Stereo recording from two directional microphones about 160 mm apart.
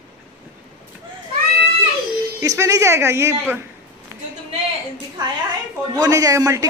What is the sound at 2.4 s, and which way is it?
A man's voice, 20° right (ahead or behind).